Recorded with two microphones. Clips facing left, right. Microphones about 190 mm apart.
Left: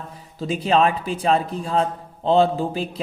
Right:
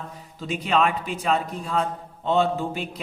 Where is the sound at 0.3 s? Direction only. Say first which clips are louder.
Left 4 dB; 35° left (ahead or behind).